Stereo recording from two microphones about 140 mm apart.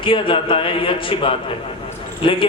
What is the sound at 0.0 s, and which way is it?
A man's voice, 40° left (ahead or behind).